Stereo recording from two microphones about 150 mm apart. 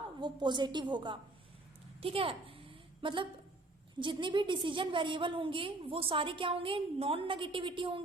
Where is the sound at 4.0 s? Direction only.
35° right (ahead or behind).